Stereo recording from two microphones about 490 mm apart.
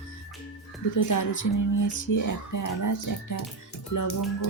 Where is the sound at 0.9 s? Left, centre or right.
Left.